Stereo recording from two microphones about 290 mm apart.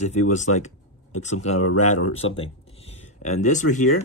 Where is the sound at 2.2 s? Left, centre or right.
Centre.